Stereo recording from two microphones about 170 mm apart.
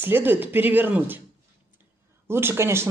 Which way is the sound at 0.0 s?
10° right (ahead or behind).